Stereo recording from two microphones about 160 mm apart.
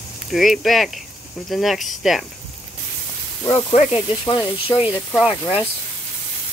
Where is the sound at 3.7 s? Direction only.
35° left (ahead or behind).